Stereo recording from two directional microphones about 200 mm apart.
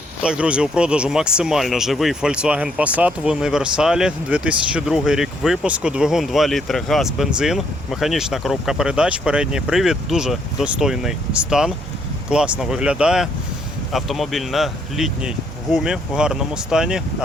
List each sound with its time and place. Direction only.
0.2 s speech: 5° right (ahead or behind)